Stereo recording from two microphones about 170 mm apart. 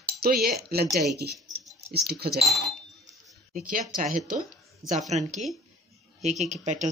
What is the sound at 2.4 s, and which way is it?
Speech, centre (ahead or behind).